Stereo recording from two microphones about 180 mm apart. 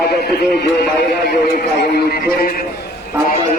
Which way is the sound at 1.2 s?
60° left (ahead or behind).